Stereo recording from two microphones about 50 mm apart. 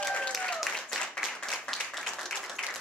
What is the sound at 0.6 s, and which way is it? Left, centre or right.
Applause, centre.